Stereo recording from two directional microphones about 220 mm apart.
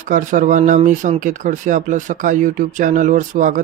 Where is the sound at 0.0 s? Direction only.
35° right (ahead or behind).